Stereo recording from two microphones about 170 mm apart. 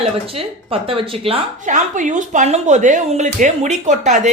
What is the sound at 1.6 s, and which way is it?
Speech, 50° right (ahead or behind).